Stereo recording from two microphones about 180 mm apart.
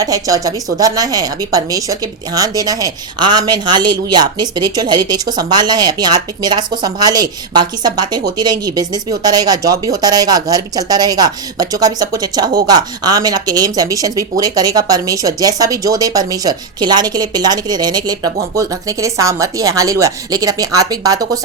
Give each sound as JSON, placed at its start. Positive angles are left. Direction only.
{"t": 0.0, "sound": "speech", "side_deg": -20}